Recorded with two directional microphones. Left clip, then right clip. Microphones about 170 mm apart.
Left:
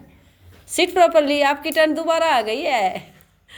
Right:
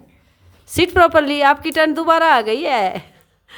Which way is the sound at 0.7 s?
40° right (ahead or behind).